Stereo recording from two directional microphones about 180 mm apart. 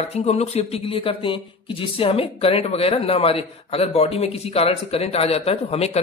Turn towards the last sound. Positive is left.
turn(degrees=35)  # may be behind; listen again after turning